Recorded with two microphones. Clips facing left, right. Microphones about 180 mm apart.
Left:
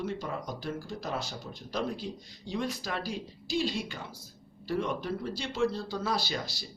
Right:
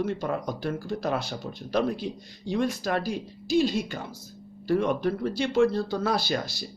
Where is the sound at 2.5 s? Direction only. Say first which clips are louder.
Right 7 dB; 50° right (ahead or behind).